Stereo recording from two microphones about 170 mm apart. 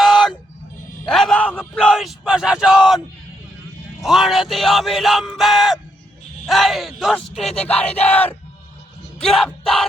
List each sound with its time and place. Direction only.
0.0 s a sound: centre (ahead or behind)
4.0 s speech: centre (ahead or behind)
9.1 s bellow: centre (ahead or behind)